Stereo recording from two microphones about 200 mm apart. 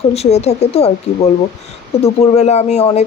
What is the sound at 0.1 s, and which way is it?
Speech, 30° left (ahead or behind).